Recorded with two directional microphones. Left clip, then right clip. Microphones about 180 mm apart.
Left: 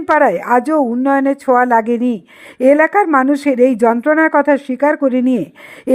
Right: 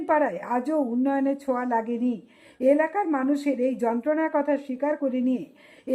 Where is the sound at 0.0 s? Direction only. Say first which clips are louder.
Left 11 dB; 40° left (ahead or behind).